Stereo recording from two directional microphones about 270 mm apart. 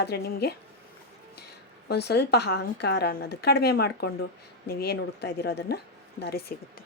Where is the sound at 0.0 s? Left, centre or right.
Left.